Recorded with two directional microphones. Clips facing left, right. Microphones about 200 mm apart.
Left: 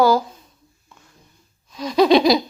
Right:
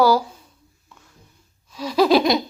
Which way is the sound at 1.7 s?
5° right (ahead or behind).